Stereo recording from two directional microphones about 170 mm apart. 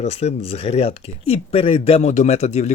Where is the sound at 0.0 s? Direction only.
40° left (ahead or behind).